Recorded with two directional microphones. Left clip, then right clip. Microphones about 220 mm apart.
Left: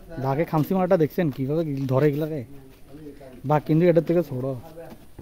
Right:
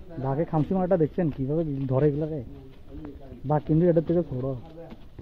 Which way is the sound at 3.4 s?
35° left (ahead or behind).